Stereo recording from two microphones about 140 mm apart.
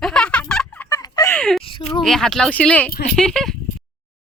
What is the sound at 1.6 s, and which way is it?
Speech, 40° left (ahead or behind).